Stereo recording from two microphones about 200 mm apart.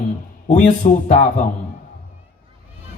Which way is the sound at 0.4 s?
35° left (ahead or behind).